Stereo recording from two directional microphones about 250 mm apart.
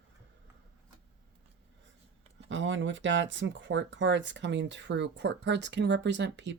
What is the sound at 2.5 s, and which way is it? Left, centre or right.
Speech, right.